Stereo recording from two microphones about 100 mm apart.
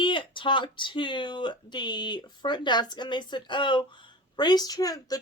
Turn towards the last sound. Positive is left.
turn(degrees=35)  # may be behind; listen again after turning